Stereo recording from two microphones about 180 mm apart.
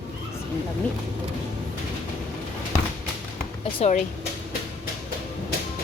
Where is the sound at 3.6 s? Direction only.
35° left (ahead or behind).